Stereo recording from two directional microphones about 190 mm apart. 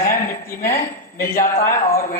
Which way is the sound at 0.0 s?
45° left (ahead or behind).